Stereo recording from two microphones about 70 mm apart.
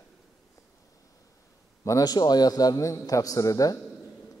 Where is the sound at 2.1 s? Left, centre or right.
Left.